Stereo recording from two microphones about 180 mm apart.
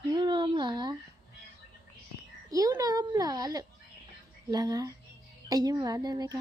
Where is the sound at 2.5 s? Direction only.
20° right (ahead or behind).